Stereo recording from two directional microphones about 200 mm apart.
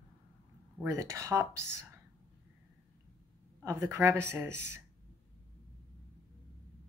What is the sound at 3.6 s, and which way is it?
Speech, 15° right (ahead or behind).